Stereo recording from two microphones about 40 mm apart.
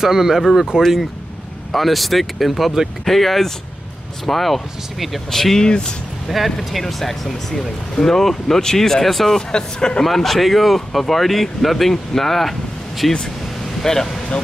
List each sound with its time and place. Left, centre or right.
0.0 s speech: centre
1.7 s speech: centre
5.7 s speech: left
6.2 s speech: centre
9.5 s speech: left
10.0 s speech: centre